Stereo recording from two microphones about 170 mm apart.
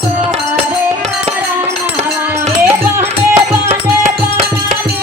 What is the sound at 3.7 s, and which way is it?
Music, 40° right (ahead or behind).